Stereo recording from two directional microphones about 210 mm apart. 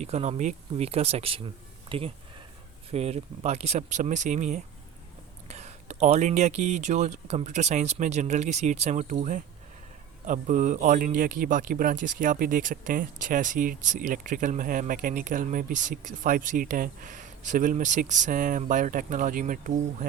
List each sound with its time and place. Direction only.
0.0 s speech: 30° right (ahead or behind)